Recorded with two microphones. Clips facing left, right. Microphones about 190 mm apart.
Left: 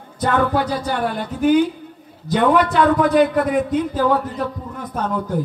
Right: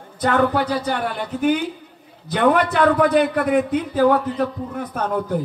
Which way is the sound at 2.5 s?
55° right (ahead or behind).